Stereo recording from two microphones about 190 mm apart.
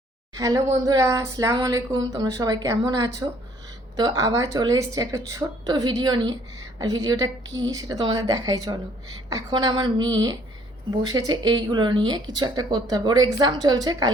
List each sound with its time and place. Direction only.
0.3 s speech: 20° right (ahead or behind)